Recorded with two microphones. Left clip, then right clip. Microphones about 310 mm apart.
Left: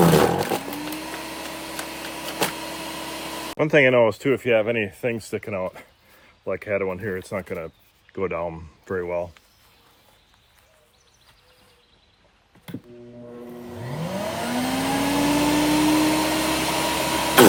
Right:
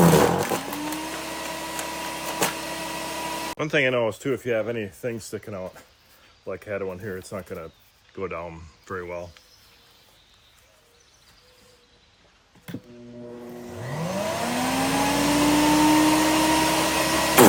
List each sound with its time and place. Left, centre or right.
0.0 s vehicle: centre
3.6 s speech: centre
14.1 s vehicle: centre